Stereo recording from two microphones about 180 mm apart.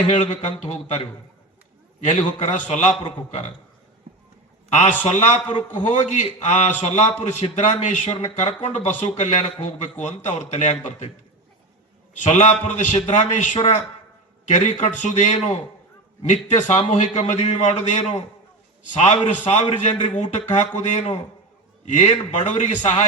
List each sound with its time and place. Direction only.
0.1 s a man's voice: 40° left (ahead or behind)
2.0 s a man's voice: 40° left (ahead or behind)
5.0 s a man's voice: 40° left (ahead or behind)
12.1 s a man's voice: 40° left (ahead or behind)